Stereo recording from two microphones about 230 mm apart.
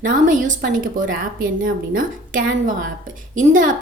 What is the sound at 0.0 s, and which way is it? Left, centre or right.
A woman's voice, right.